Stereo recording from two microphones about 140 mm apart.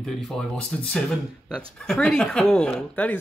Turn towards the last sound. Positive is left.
turn(degrees=10)  # may be behind; listen again after turning